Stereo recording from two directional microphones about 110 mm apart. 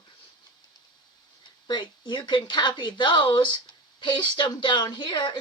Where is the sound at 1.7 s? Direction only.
45° left (ahead or behind).